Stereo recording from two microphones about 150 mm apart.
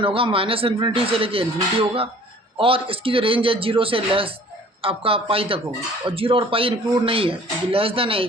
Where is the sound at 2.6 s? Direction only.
35° right (ahead or behind).